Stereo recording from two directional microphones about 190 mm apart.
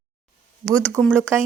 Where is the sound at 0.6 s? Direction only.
5° left (ahead or behind).